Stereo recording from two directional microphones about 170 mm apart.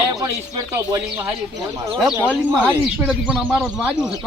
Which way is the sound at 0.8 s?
15° right (ahead or behind).